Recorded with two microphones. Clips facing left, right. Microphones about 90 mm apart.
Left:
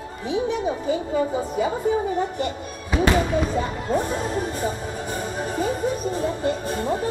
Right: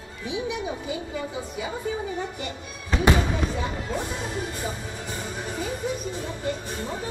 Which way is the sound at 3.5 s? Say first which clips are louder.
Left 6 dB; 40° left (ahead or behind).